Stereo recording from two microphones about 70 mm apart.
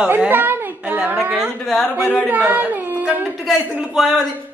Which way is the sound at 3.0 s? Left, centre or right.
Right.